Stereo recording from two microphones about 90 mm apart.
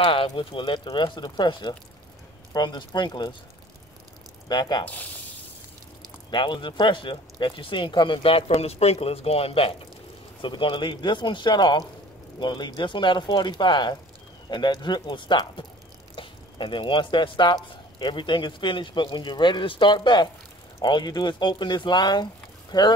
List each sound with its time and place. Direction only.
0.0 s speech: 75° left (ahead or behind); by 3.3 s 55° left (ahead or behind)
4.5 s speech: 50° left (ahead or behind)
6.3 s speech: 60° left (ahead or behind)
8.2 s speech: 90° left
10.4 s speech: 65° left (ahead or behind)